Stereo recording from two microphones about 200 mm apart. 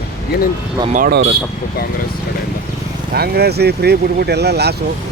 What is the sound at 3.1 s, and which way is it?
Speech, 50° right (ahead or behind).